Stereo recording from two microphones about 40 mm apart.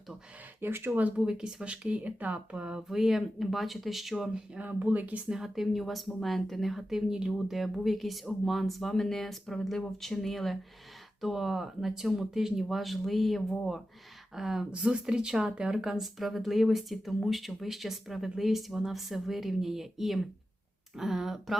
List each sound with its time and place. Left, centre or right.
0.6 s speech: right
1.1 s speech: right
2.5 s speech: right
2.9 s speech: centre
4.6 s speech: right
5.5 s speech: centre
7.1 s speech: centre
7.3 s speech: centre
14.3 s speech: centre
14.7 s speech: right
16.0 s speech: centre